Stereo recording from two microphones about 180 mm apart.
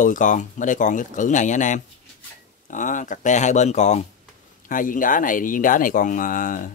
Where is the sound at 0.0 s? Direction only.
45° left (ahead or behind).